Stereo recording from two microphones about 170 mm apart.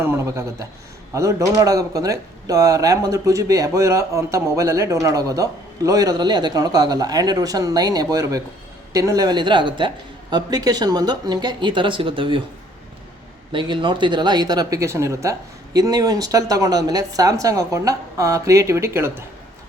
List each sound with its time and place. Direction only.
0.0 s speech: 15° right (ahead or behind); by 12.4 s 30° right (ahead or behind)
13.5 s speech: 30° right (ahead or behind)